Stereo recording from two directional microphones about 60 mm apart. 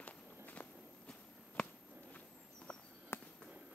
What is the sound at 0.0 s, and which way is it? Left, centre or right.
Walk, left.